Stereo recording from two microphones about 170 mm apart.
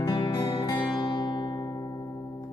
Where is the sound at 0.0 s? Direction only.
25° left (ahead or behind).